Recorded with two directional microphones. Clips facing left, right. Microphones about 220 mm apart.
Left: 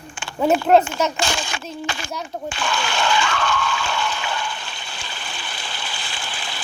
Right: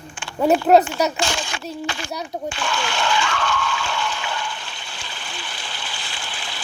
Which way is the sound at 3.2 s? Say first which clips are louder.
Left 1 dB; 45° left (ahead or behind).